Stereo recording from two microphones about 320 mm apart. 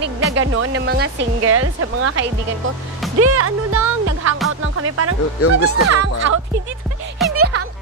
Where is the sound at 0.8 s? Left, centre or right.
Right.